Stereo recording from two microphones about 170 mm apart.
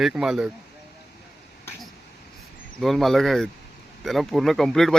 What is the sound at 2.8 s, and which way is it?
Speech, centre (ahead or behind).